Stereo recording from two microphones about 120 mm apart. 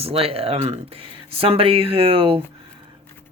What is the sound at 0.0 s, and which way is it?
Speech, 55° right (ahead or behind).